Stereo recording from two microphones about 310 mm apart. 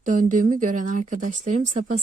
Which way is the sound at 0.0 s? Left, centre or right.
Right.